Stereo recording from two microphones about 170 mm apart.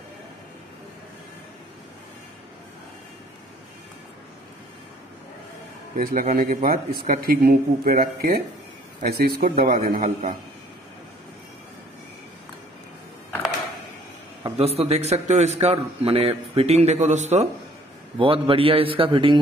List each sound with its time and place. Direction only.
5.9 s speech: 55° right (ahead or behind)
14.4 s a man's voice: 35° right (ahead or behind)